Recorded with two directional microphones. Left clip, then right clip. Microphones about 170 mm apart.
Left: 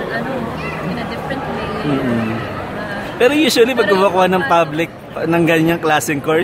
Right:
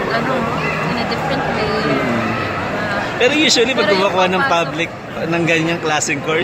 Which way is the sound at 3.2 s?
40° left (ahead or behind).